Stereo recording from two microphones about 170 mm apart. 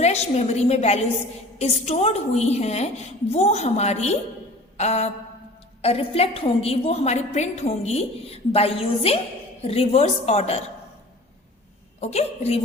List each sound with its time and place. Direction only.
0.0 s a woman's voice: 40° left (ahead or behind)
11.9 s a woman's voice: 40° left (ahead or behind)